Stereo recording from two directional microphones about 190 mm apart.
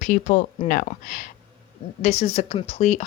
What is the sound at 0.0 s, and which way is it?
A woman's voice, 40° left (ahead or behind).